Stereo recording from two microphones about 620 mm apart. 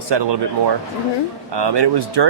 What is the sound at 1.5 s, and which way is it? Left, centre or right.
Speech, right.